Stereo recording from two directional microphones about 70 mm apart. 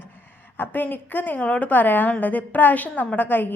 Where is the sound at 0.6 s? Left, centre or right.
Left.